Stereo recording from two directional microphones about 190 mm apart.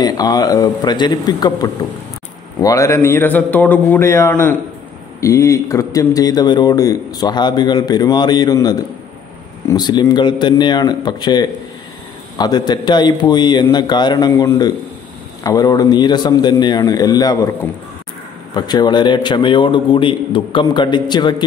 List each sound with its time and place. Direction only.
0.0 s a man's voice: 20° left (ahead or behind)
18.5 s a man's voice: 20° left (ahead or behind)